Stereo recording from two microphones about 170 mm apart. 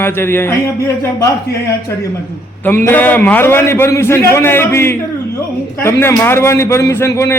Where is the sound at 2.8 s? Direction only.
10° left (ahead or behind).